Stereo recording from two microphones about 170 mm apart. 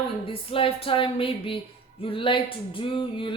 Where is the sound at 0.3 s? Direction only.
30° left (ahead or behind).